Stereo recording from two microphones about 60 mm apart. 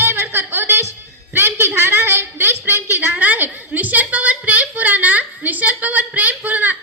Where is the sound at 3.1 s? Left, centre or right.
Right.